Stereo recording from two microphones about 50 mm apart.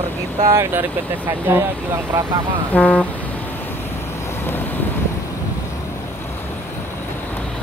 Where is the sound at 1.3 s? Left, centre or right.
Right.